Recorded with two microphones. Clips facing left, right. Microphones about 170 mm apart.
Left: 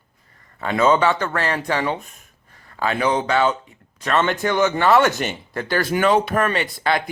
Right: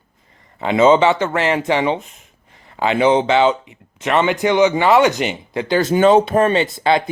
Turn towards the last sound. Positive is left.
turn(degrees=-25)  # may be behind; listen again after turning